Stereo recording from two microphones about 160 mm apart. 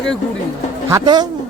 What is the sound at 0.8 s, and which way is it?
Speech, 20° right (ahead or behind).